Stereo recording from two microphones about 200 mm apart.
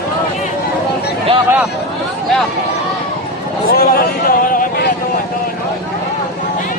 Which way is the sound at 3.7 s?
50° left (ahead or behind).